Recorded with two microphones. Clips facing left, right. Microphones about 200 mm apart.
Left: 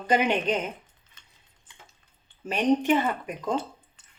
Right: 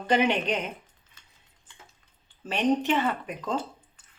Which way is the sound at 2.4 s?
10° left (ahead or behind).